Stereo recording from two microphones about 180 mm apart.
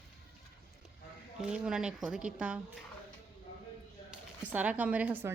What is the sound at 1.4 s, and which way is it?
Speech, 5° right (ahead or behind).